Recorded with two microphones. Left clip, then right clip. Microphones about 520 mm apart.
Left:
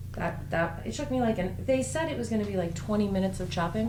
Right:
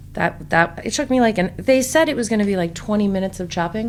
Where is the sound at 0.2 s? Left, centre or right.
Right.